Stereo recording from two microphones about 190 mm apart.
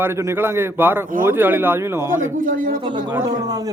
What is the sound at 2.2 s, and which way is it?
Speech, 45° right (ahead or behind).